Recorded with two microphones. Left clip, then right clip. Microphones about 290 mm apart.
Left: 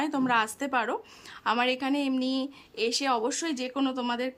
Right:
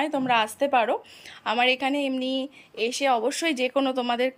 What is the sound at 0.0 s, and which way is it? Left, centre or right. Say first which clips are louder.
A woman's voice: right 3 dB; centre.